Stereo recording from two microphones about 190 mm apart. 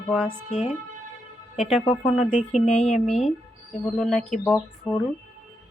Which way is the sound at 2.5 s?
35° left (ahead or behind).